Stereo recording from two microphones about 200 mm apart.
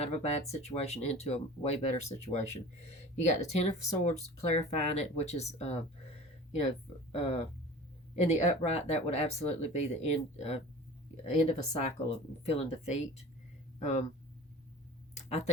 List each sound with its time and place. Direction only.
0.0 s speech: 30° left (ahead or behind)
7.2 s speech: 30° left (ahead or behind)
15.1 s a sound: 30° left (ahead or behind)